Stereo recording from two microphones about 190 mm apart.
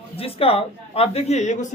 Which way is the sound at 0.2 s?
30° left (ahead or behind).